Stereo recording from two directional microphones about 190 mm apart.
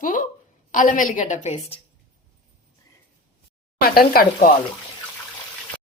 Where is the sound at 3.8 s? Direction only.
50° left (ahead or behind).